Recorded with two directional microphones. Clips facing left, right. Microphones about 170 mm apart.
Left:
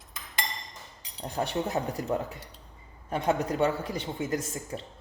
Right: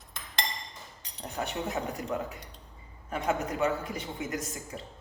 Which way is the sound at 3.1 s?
35° left (ahead or behind).